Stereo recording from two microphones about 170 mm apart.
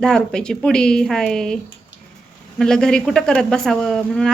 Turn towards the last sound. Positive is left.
turn(degrees=5)  # may be behind; listen again after turning